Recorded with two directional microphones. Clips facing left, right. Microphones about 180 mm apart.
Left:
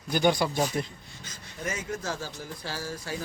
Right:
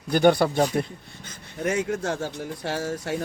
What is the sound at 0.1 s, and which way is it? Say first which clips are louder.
Speech: right 6 dB; 60° right (ahead or behind).